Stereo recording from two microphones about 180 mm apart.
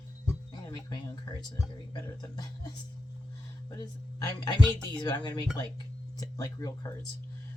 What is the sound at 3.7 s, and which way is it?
Speech, 20° left (ahead or behind).